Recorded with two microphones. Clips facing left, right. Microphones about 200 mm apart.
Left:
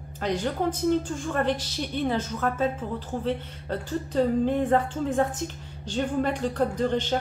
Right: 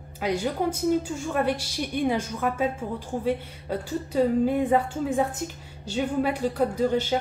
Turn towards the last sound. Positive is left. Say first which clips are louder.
# right 2 dB
turn(degrees=-10)  # may be behind; listen again after turning